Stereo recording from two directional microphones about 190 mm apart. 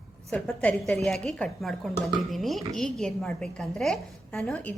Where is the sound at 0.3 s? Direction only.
5° left (ahead or behind).